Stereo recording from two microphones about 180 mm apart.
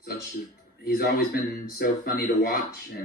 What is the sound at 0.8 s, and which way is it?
A man's voice, 60° left (ahead or behind).